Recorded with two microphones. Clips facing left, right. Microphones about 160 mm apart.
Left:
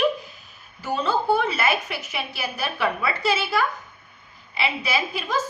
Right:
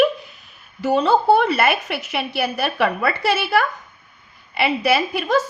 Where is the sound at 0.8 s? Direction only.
70° right (ahead or behind).